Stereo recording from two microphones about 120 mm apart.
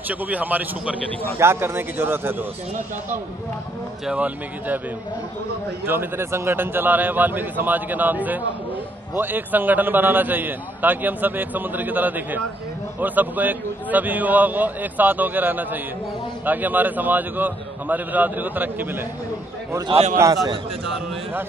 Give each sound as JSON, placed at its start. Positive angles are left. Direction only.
{"t": 0.1, "sound": "a man's voice", "side_deg": -15}
{"t": 4.0, "sound": "a man's voice", "side_deg": -10}
{"t": 5.9, "sound": "a man's voice", "side_deg": -20}
{"t": 19.9, "sound": "a man's voice", "side_deg": -65}